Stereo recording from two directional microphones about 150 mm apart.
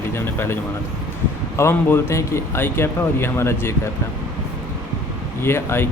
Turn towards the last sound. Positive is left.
turn(degrees=15)  # may be behind; listen again after turning